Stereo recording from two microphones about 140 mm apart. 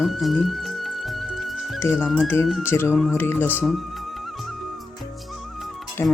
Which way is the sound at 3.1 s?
15° left (ahead or behind).